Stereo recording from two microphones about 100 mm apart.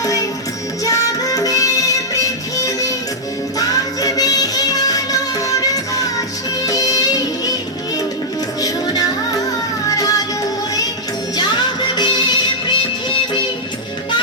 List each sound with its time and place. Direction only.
0.0 s music: 35° left (ahead or behind)
8.6 s music: 40° left (ahead or behind)
11.3 s music: 45° left (ahead or behind)